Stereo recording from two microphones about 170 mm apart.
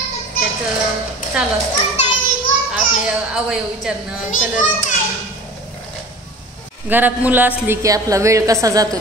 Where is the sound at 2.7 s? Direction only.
5° right (ahead or behind).